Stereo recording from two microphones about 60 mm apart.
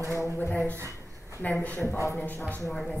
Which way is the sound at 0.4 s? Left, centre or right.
Left.